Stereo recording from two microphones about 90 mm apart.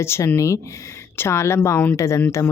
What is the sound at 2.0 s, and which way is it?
Speech, 35° left (ahead or behind).